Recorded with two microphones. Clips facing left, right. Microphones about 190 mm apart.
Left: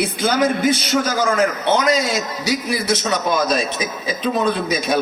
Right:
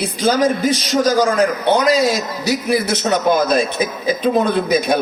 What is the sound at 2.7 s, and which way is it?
A man's voice, 60° right (ahead or behind).